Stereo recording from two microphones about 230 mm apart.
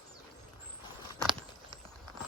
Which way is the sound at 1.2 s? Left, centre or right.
Centre.